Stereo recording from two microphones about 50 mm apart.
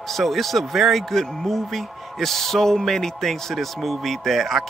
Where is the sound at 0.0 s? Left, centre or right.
Centre.